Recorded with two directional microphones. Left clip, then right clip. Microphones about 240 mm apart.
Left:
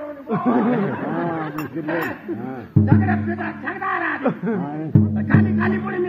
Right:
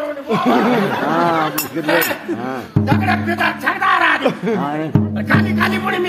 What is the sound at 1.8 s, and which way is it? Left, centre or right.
Music, right.